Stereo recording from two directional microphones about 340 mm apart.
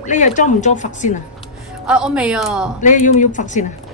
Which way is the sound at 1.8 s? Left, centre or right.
Centre.